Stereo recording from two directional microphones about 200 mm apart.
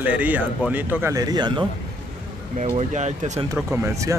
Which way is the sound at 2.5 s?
35° right (ahead or behind).